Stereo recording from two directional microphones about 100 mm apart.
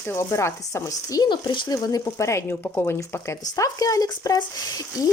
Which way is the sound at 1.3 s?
50° left (ahead or behind).